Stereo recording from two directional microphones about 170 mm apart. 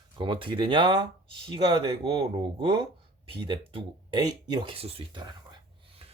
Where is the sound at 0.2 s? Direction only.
30° right (ahead or behind).